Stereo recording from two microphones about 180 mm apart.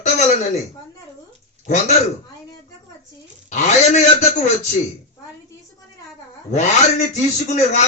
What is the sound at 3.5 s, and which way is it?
Speech, 40° left (ahead or behind).